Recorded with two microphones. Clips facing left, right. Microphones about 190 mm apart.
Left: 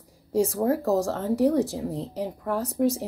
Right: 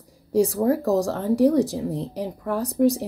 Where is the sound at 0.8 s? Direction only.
40° right (ahead or behind).